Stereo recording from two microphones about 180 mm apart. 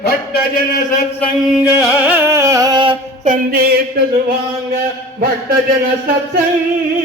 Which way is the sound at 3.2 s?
55° right (ahead or behind).